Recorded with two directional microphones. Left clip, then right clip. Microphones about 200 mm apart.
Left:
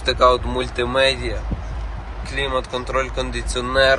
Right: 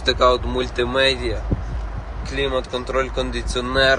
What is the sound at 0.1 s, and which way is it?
Speech, 20° right (ahead or behind).